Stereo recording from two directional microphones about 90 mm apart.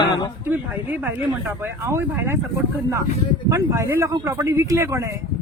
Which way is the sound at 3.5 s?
35° right (ahead or behind).